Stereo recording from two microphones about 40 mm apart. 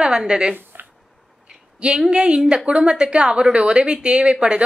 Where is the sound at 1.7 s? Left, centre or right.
Right.